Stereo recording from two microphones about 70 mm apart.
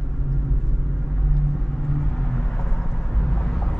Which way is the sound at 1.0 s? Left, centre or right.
Centre.